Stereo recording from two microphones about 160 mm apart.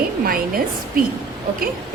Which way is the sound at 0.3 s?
65° right (ahead or behind).